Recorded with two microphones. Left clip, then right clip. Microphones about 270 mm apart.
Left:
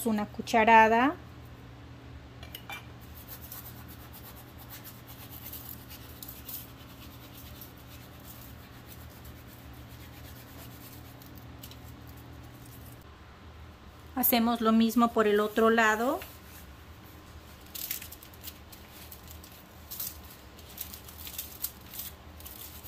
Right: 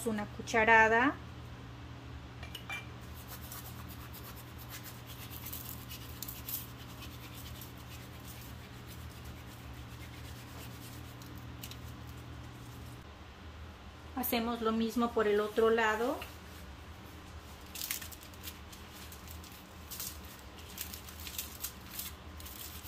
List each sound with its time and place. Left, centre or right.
0.0 s a woman's voice: left
14.1 s a woman's voice: left